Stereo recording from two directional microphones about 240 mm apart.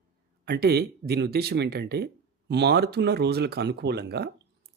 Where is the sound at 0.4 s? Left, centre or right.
Right.